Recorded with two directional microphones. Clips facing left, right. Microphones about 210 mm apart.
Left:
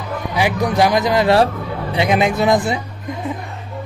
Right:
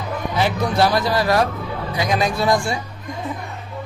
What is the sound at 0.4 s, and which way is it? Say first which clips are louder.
Speech: left 2 dB; 15° left (ahead or behind).